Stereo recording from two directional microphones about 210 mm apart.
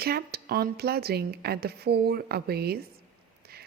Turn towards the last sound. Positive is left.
turn(degrees=-50)  # may be behind; listen again after turning